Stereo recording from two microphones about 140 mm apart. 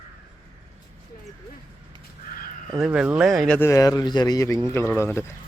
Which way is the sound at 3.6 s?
20° left (ahead or behind).